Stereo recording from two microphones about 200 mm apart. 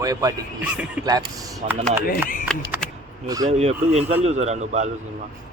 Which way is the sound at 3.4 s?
35° right (ahead or behind).